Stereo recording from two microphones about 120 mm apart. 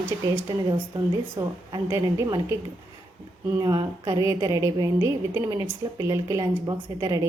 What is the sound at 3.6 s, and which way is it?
A woman's voice, 35° right (ahead or behind).